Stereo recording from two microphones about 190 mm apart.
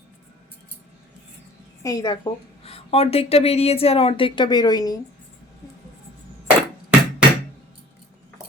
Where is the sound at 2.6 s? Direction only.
30° left (ahead or behind).